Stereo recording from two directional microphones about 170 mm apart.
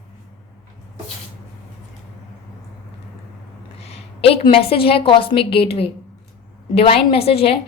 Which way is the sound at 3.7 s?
35° left (ahead or behind).